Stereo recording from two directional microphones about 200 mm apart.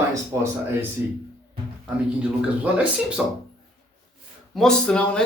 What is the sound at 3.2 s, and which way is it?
Speech, 5° right (ahead or behind).